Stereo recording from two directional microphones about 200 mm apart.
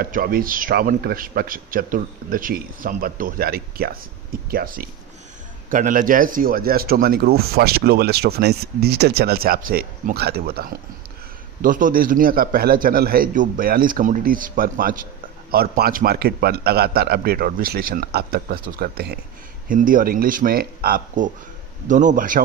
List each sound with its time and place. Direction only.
0.0 s a man's voice: 45° right (ahead or behind)